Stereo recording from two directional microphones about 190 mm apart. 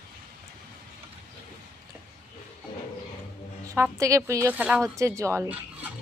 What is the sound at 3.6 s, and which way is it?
A woman's voice, 15° right (ahead or behind).